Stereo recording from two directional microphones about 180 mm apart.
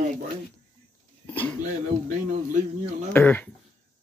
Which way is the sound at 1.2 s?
10° left (ahead or behind).